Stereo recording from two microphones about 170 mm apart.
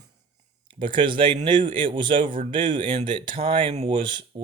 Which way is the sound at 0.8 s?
30° right (ahead or behind).